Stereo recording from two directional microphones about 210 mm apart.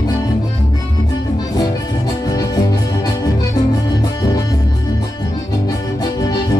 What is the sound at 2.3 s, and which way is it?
Music, 20° left (ahead or behind).